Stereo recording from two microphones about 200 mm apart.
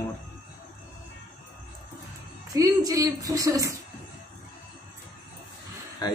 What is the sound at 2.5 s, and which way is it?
A woman's voice, 20° right (ahead or behind).